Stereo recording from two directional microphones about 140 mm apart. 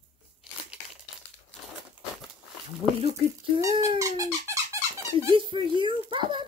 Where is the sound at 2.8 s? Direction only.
35° right (ahead or behind).